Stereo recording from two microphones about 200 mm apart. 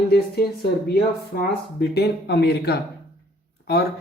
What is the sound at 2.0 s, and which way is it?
Speech, 55° left (ahead or behind).